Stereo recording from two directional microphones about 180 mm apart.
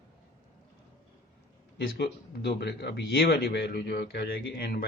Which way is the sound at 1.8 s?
65° left (ahead or behind).